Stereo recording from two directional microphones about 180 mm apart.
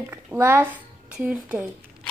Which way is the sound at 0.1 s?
10° right (ahead or behind).